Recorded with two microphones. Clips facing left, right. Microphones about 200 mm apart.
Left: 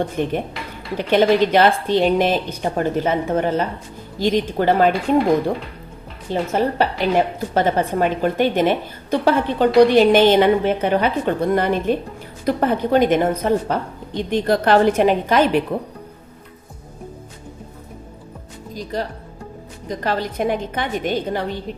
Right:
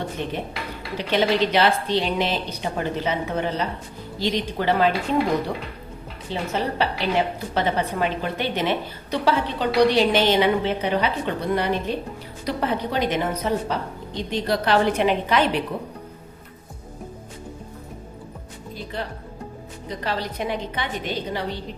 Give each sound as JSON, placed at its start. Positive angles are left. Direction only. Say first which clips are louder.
{"t": 0.2, "sound": "a woman's voice", "louder": "left 6 dB", "side_deg": 50}
{"t": 6.3, "sound": "a woman's voice", "louder": "left 6 dB", "side_deg": 50}
{"t": 18.7, "sound": "music", "louder": "left 6 dB", "side_deg": 40}
{"t": 19.9, "sound": "a woman's voice", "louder": "left 5 dB", "side_deg": 50}